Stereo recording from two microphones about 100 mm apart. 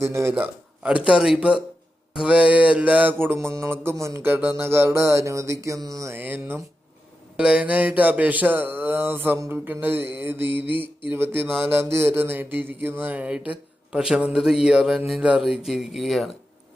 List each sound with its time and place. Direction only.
0.0 s mantra: 25° right (ahead or behind)
0.3 s mantra: 15° right (ahead or behind)
7.3 s mantra: 10° right (ahead or behind)